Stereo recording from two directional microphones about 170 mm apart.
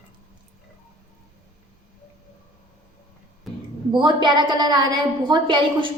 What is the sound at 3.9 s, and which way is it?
A woman's voice, 25° right (ahead or behind).